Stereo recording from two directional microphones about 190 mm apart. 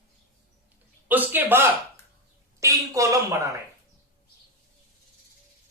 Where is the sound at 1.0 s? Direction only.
10° right (ahead or behind).